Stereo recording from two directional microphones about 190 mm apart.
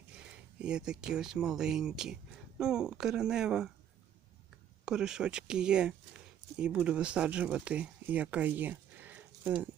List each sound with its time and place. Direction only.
0.6 s speech: 5° right (ahead or behind)
4.9 s speech: 5° right (ahead or behind)